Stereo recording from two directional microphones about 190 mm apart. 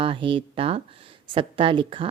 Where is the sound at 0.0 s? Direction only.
25° right (ahead or behind).